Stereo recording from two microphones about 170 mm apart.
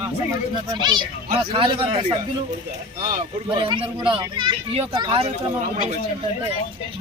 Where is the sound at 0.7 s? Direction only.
25° right (ahead or behind).